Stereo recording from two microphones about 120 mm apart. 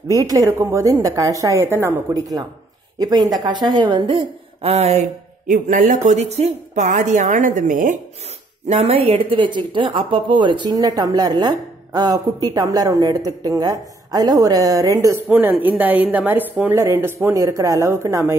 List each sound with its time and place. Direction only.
0.1 s speech: 30° right (ahead or behind)
3.0 s a woman's voice: 35° right (ahead or behind); by 5.0 s 65° right (ahead or behind)
5.7 s a woman's voice: 85° right
8.6 s speech: 55° right (ahead or behind); by 15.2 s 25° right (ahead or behind)
15.2 s a woman's voice: 15° right (ahead or behind)